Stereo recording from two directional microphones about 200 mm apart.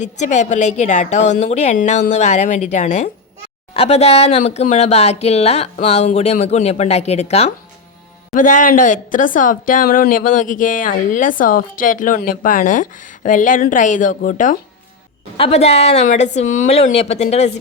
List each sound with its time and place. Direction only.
0.0 s speech: 35° left (ahead or behind)